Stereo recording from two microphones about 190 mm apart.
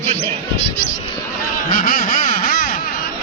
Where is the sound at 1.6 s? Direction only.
45° left (ahead or behind).